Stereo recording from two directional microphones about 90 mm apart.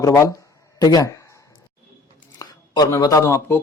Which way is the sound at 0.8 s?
50° left (ahead or behind).